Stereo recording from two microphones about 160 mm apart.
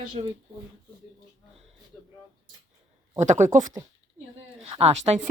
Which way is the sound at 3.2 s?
50° right (ahead or behind).